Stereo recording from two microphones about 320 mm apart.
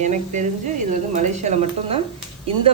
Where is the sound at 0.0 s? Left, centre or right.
Right.